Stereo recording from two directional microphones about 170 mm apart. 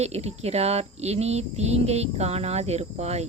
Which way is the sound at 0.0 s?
40° right (ahead or behind).